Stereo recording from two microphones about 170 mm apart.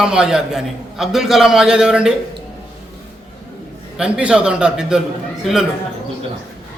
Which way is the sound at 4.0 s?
5° right (ahead or behind).